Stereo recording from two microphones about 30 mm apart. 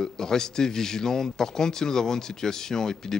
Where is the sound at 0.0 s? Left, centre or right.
Centre.